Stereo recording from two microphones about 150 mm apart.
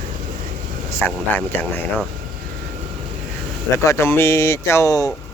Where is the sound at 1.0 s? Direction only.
15° left (ahead or behind).